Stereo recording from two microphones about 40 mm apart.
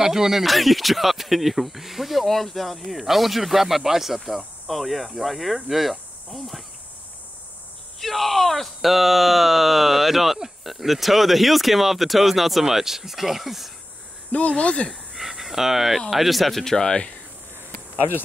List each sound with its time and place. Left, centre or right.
0.0 s speech: centre
8.0 s speech: centre
14.3 s speech: left
14.9 s a sound: centre
16.1 s speech: centre
16.6 s speech: centre